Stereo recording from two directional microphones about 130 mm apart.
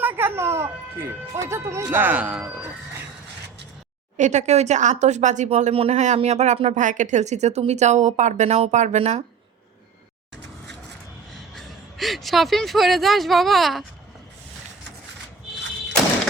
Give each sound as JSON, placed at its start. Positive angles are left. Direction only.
{"t": 0.0, "sound": "speech", "side_deg": -15}
{"t": 4.2, "sound": "speech", "side_deg": -65}
{"t": 5.7, "sound": "speech", "side_deg": -55}
{"t": 11.5, "sound": "a woman's voice", "side_deg": 0}